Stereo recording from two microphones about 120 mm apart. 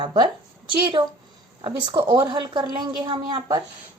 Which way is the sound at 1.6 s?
40° right (ahead or behind).